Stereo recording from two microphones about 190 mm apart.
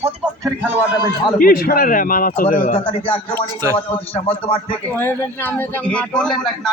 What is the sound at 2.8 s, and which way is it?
Speech, 30° left (ahead or behind).